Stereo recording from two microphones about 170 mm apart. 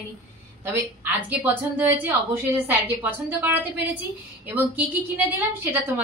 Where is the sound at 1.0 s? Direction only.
10° right (ahead or behind).